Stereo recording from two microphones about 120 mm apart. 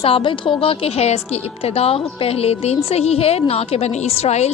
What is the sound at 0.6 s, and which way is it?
A woman's voice, 55° left (ahead or behind).